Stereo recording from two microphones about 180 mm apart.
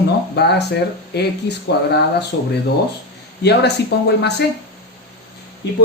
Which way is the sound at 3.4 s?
65° left (ahead or behind).